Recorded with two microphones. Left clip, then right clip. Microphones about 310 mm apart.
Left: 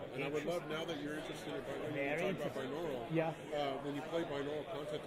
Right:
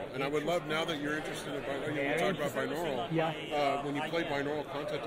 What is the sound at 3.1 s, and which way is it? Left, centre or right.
Speech, centre.